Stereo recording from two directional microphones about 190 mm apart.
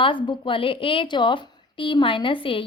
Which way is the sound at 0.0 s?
25° left (ahead or behind).